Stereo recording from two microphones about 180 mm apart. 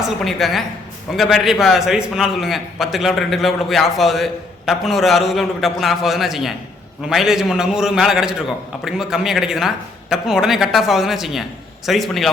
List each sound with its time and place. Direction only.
0.3 s a man's voice: centre (ahead or behind)